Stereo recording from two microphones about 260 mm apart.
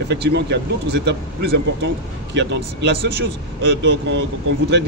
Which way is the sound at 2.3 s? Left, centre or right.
Right.